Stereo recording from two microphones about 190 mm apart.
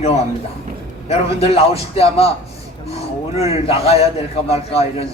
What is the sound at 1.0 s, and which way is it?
A man's voice, 30° left (ahead or behind).